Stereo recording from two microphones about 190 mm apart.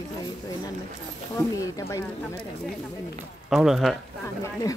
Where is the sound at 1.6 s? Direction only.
15° left (ahead or behind).